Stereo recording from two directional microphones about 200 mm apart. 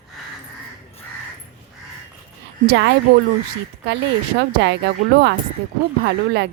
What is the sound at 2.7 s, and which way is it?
Speech, 60° right (ahead or behind).